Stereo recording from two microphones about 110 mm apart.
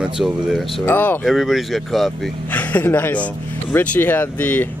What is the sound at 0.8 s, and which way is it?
Speech, 20° left (ahead or behind).